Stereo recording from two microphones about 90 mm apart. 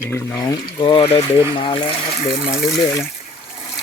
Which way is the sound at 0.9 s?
90° left.